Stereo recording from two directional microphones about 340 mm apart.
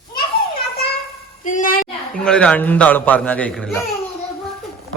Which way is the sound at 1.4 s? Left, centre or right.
Left.